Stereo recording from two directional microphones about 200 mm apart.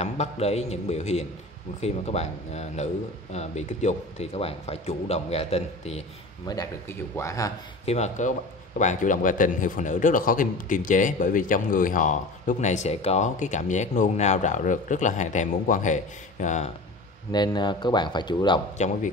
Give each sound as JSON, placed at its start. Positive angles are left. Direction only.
{"t": 0.0, "sound": "speech", "side_deg": 30}
{"t": 6.4, "sound": "speech", "side_deg": 20}
{"t": 7.8, "sound": "speech", "side_deg": 35}
{"t": 17.3, "sound": "speech", "side_deg": 20}
{"t": 18.8, "sound": "speech", "side_deg": 35}